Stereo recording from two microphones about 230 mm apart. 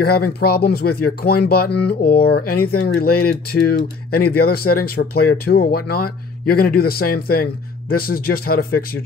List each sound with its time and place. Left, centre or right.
0.0 s speech: left